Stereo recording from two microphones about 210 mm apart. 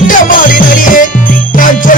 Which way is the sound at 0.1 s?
40° left (ahead or behind).